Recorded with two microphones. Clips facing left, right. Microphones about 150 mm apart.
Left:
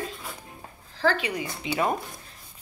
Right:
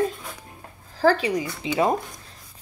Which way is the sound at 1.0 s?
35° right (ahead or behind).